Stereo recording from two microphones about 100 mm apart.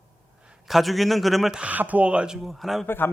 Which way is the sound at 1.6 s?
15° right (ahead or behind).